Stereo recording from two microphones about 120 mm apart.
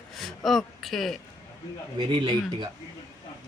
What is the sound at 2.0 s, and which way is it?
Speech, 45° right (ahead or behind).